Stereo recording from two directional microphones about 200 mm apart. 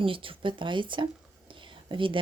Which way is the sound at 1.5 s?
25° right (ahead or behind).